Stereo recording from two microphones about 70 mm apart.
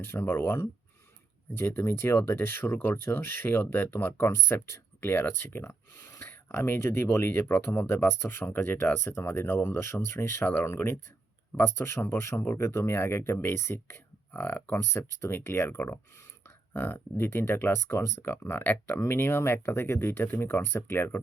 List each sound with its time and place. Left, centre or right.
0.0 s speech: left